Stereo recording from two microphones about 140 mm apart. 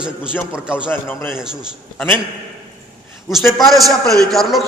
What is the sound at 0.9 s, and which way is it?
Speech, 15° left (ahead or behind).